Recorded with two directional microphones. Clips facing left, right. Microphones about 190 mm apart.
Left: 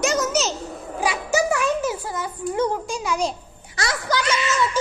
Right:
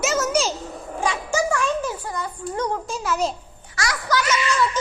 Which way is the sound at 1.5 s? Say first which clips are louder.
Left 2 dB; 10° left (ahead or behind).